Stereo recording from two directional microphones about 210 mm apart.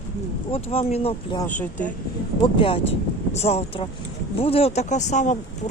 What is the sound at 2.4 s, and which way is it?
Speech, 25° left (ahead or behind).